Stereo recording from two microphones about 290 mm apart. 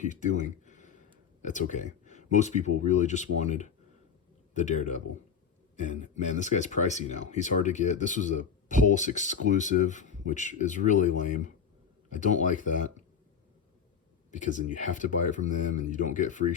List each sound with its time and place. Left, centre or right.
0.0 s a sound: left
1.4 s speech: left
14.3 s speech: left